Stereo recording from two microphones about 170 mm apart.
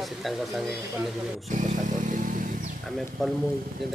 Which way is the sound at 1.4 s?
50° right (ahead or behind).